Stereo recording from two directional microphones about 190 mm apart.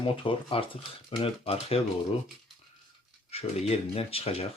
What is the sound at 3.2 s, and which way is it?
Speech, 35° left (ahead or behind).